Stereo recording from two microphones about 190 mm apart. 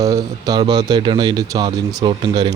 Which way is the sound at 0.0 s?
20° right (ahead or behind).